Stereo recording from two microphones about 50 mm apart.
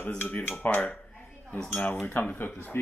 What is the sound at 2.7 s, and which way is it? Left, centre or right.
Speech, left.